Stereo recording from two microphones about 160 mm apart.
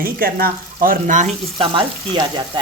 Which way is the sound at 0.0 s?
65° right (ahead or behind).